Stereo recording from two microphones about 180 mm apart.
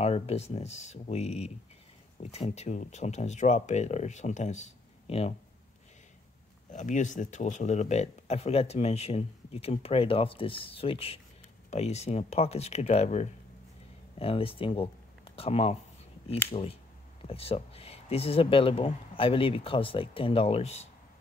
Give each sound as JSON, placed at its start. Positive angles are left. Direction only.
{"t": 0.0, "sound": "speech", "side_deg": 35}
{"t": 6.7, "sound": "speech", "side_deg": 45}